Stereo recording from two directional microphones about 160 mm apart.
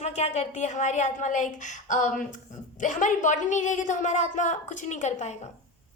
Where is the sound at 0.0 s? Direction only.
45° left (ahead or behind).